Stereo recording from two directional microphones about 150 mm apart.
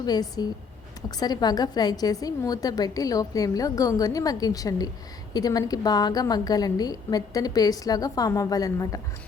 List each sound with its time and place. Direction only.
0.0 s a woman's voice: 25° left (ahead or behind)